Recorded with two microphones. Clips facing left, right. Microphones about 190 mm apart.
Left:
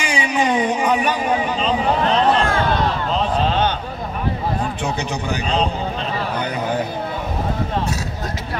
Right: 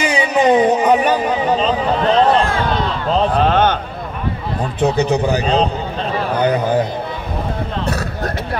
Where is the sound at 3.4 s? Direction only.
55° right (ahead or behind).